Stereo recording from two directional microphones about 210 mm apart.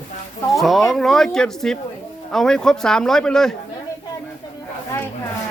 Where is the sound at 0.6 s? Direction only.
Centre (ahead or behind).